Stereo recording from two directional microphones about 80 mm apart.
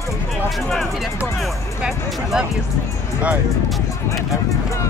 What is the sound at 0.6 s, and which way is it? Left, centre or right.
Speech, centre.